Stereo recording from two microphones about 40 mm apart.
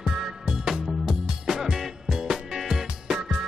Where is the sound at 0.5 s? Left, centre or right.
Centre.